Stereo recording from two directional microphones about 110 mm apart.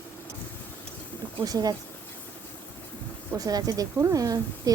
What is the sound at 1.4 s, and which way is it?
Speech, 35° right (ahead or behind).